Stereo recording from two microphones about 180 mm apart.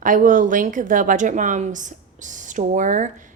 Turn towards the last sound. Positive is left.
turn(degrees=-45)  # may be behind; listen again after turning